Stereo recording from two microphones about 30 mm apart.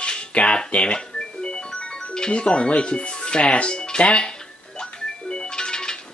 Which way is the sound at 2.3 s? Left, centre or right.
Left.